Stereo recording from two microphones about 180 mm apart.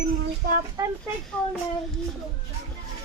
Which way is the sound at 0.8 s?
15° right (ahead or behind).